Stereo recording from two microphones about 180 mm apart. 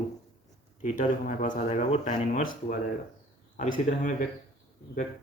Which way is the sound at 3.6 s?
45° left (ahead or behind).